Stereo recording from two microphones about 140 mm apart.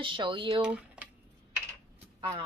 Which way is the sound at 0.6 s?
10° right (ahead or behind).